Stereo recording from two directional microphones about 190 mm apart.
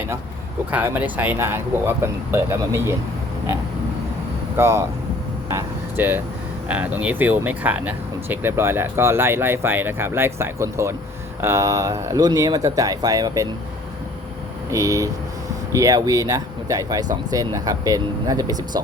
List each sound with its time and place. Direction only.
0.7 s speech: 10° right (ahead or behind)
4.5 s speech: 15° right (ahead or behind)
14.7 s speech: 15° right (ahead or behind)